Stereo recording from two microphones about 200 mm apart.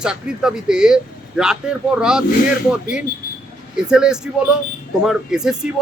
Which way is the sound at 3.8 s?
5° right (ahead or behind).